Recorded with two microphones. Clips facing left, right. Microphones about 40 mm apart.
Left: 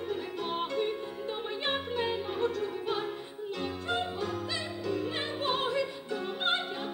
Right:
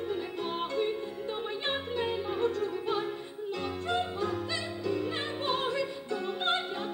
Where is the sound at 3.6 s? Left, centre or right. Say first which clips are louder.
Right 1 dB; centre.